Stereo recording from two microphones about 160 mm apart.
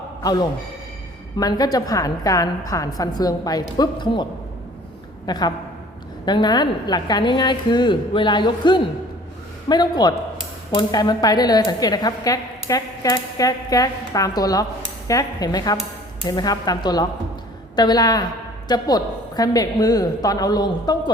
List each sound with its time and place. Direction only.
0.2 s a man's voice: 25° left (ahead or behind)